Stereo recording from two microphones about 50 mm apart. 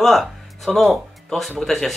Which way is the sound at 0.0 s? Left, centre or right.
Centre.